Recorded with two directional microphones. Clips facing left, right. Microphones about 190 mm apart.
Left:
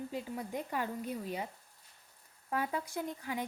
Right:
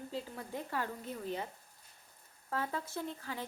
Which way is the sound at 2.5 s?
15° left (ahead or behind).